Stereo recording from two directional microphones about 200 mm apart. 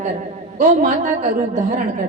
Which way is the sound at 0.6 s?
40° right (ahead or behind).